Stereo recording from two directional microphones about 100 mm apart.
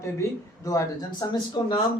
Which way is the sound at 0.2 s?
35° left (ahead or behind).